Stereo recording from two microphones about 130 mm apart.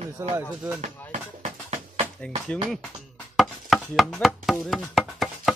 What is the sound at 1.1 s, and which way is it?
Music, 65° right (ahead or behind).